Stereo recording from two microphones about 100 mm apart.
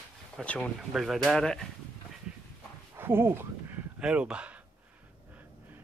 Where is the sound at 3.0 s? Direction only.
25° right (ahead or behind).